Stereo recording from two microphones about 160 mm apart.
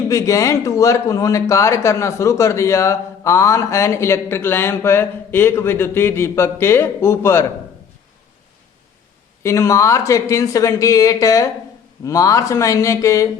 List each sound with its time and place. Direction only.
0.1 s speech: 20° left (ahead or behind)
9.4 s speech: 20° left (ahead or behind)